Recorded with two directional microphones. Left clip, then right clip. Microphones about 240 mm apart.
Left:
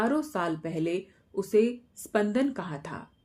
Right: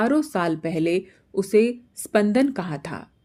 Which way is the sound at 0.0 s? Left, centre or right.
Right.